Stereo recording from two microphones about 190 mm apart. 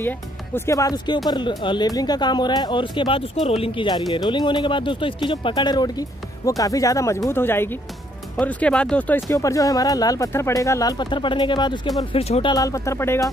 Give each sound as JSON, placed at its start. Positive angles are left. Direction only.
{"t": 0.6, "sound": "speech", "side_deg": 15}